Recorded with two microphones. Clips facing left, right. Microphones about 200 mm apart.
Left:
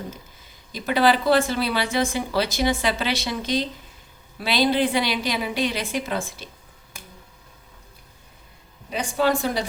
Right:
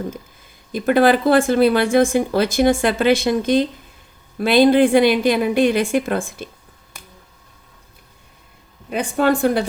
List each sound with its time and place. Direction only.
0.7 s speech: 50° right (ahead or behind)
8.9 s speech: 55° right (ahead or behind)